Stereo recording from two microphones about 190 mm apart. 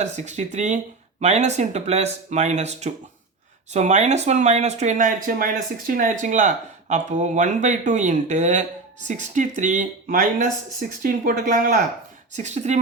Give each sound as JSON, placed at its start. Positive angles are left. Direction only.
{"t": 0.0, "sound": "speech", "side_deg": -35}